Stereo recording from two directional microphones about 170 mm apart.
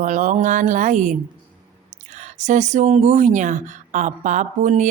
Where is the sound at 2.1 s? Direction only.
45° right (ahead or behind).